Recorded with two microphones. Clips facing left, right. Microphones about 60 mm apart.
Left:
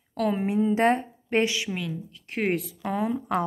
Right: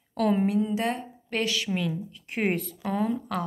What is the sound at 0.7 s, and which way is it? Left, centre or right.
Speech, left.